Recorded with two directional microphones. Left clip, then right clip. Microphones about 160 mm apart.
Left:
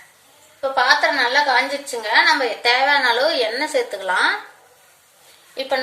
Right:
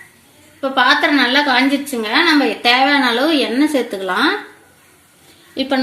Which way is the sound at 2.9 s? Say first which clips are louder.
Right 2 dB; 50° right (ahead or behind).